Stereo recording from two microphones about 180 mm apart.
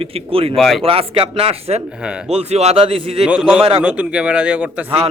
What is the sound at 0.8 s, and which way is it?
A man's voice, 30° right (ahead or behind).